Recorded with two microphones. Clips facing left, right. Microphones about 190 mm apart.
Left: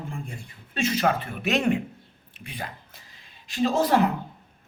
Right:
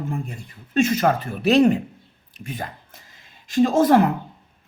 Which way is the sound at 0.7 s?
45° right (ahead or behind).